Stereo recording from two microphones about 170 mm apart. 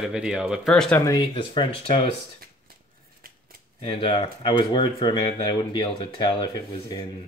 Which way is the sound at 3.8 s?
30° left (ahead or behind).